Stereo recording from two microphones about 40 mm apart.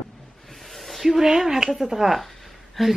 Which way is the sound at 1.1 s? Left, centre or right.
Centre.